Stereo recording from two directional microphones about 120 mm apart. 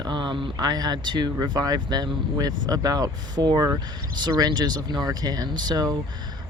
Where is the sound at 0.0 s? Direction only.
40° right (ahead or behind).